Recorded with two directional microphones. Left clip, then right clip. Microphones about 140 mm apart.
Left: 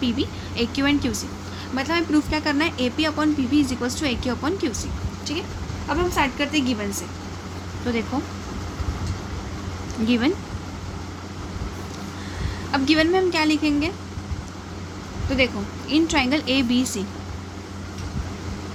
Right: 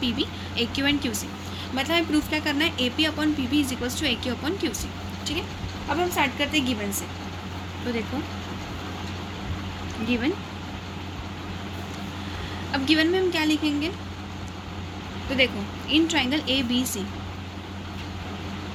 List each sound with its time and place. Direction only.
0.0 s speech: 60° left (ahead or behind)
1.7 s speech: 50° left (ahead or behind)
5.9 s speech: 55° left (ahead or behind)
7.9 s speech: 90° left
12.7 s a woman's voice: 75° left (ahead or behind)
15.3 s speech: 65° left (ahead or behind); by 17.0 s 80° left